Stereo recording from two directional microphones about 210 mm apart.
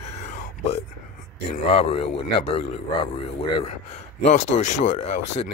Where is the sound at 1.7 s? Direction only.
30° left (ahead or behind).